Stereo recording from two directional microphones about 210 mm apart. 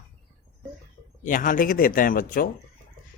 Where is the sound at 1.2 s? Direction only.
40° left (ahead or behind).